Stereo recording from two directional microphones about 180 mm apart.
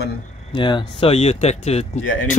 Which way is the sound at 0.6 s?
25° left (ahead or behind).